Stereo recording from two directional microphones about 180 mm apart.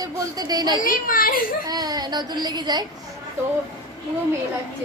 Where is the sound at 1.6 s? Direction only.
20° right (ahead or behind).